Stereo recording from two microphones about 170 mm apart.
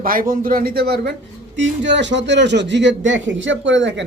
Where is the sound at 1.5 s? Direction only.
90° right.